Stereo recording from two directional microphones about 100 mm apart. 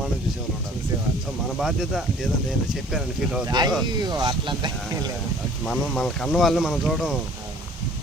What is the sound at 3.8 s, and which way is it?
Speech, 45° right (ahead or behind).